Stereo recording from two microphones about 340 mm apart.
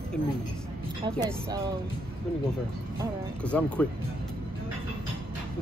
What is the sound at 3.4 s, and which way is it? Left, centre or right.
Speech, centre.